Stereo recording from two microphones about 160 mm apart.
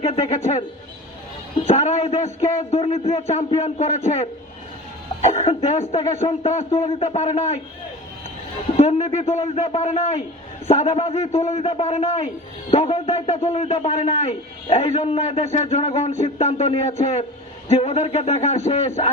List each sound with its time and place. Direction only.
0.0 s a man's voice: 40° left (ahead or behind)
8.7 s a man's voice: 40° left (ahead or behind)